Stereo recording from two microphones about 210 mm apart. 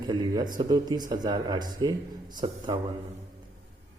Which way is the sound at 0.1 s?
20° right (ahead or behind).